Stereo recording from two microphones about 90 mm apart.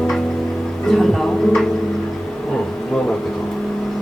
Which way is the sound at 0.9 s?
5° left (ahead or behind).